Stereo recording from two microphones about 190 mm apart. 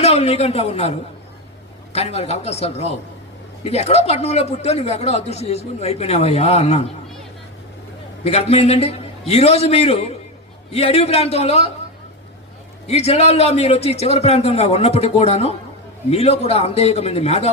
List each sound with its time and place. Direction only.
0.0 s a man's voice: 35° left (ahead or behind)
8.2 s speech: 30° left (ahead or behind)
12.9 s speech: 35° left (ahead or behind)